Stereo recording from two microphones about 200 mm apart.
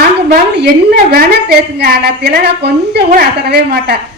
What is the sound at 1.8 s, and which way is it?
A woman's voice, 55° right (ahead or behind).